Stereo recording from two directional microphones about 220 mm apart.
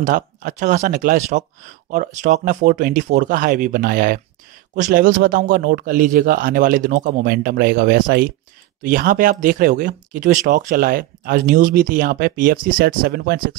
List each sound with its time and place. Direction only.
0.0 s speech: 35° right (ahead or behind)